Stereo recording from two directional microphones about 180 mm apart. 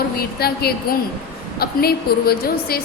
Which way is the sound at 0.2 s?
60° left (ahead or behind).